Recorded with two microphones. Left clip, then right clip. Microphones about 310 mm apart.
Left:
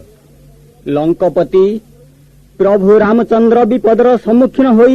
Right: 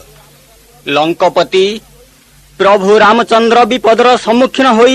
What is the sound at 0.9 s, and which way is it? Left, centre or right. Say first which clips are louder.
Speech: right 3 dB; centre.